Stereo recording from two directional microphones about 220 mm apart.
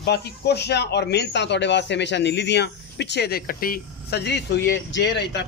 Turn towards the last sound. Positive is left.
turn(degrees=50)  # may be behind; listen again after turning